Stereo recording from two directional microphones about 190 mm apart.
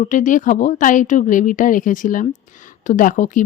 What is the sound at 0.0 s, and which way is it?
A woman's voice, 40° left (ahead or behind).